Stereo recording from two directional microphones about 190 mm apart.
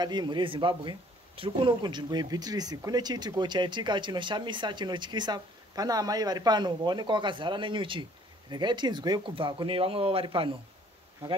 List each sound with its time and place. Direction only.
0.0 s a man's voice: 25° right (ahead or behind)